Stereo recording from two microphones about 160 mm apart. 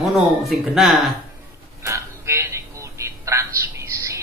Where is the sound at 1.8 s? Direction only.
15° right (ahead or behind).